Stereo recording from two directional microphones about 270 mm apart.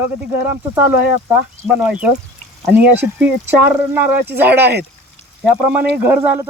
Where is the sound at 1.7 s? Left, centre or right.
Centre.